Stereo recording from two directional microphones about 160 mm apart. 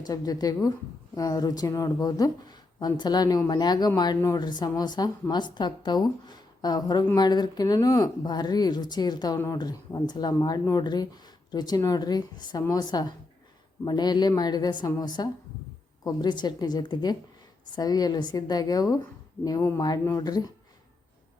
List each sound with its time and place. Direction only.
0.0 s speech: 25° left (ahead or behind)